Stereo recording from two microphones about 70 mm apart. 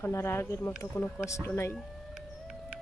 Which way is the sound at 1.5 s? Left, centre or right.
Left.